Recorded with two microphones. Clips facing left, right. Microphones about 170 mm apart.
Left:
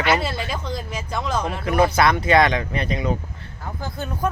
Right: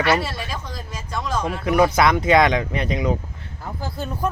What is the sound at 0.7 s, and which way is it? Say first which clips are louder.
Music: left 3 dB; 25° left (ahead or behind).